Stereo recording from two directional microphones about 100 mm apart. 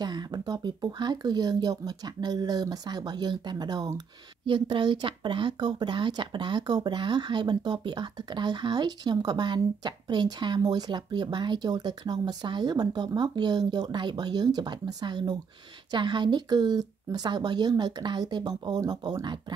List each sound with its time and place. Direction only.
0.0 s speech: 45° right (ahead or behind)